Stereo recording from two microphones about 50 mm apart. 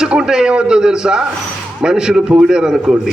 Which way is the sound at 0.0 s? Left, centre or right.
Centre.